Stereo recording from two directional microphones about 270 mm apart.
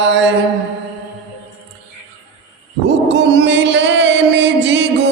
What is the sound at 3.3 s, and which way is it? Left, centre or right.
Music, right.